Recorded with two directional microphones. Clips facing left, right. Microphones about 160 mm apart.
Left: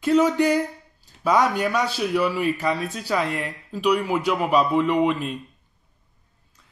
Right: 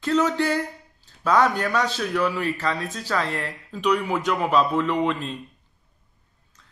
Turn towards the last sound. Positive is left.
turn(degrees=10)  # may be behind; listen again after turning